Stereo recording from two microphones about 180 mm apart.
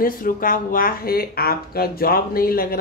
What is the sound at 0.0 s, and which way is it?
Speech, 50° left (ahead or behind).